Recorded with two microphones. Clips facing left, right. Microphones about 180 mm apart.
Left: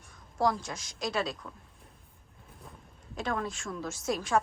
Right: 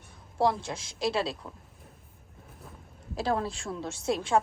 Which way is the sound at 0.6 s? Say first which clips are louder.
Right 5 dB; 30° right (ahead or behind).